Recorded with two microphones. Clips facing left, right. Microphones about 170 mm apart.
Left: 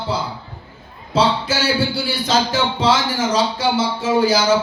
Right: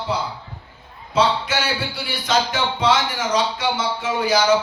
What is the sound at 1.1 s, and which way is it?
Speech, 30° left (ahead or behind).